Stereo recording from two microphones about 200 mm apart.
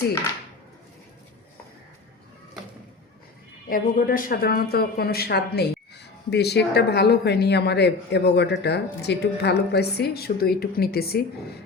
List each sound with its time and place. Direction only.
3.7 s speech: 45° left (ahead or behind)